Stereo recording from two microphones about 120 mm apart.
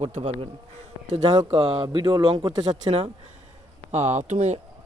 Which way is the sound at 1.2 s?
45° right (ahead or behind).